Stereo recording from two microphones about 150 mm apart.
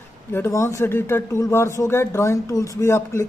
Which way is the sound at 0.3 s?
15° left (ahead or behind).